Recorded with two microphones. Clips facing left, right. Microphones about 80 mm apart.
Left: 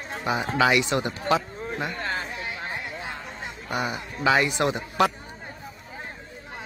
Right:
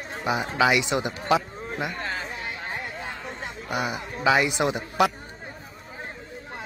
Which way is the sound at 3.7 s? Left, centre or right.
Centre.